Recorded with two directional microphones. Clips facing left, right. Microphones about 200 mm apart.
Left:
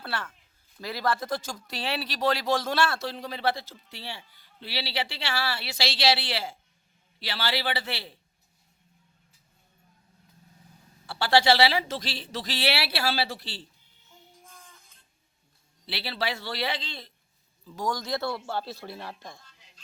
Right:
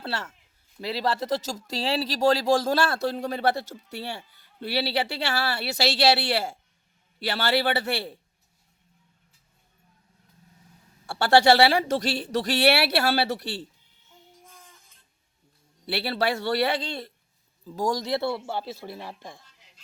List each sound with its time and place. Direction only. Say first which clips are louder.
0.0 s a man's voice: right 2 dB; 25° right (ahead or behind); by 8.2 s 45° right (ahead or behind)
11.2 s speech: right 4 dB; 45° right (ahead or behind)
15.9 s speech: right 6 dB; 50° right (ahead or behind)
17.7 s speech: right 4 dB; 30° right (ahead or behind); by 19.5 s 15° right (ahead or behind)